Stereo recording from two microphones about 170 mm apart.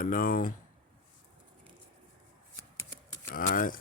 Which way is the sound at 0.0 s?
55° left (ahead or behind).